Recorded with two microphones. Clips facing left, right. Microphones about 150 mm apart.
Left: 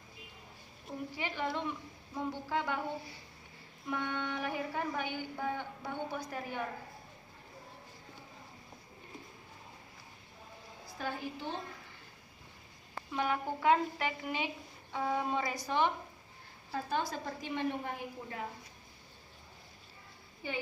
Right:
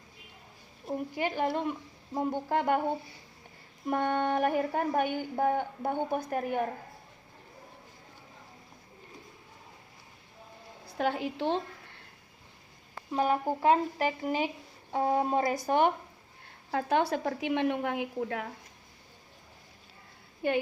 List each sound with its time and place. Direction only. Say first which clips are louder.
1.1 s a woman's voice: right 6 dB; 50° right (ahead or behind)
3.8 s a woman's voice: right 9 dB; 50° right (ahead or behind)
10.9 s a woman's voice: right 9 dB; 70° right (ahead or behind)
13.1 s a woman's voice: right 6 dB; 35° right (ahead or behind)
16.7 s a woman's voice: right 8 dB; 70° right (ahead or behind)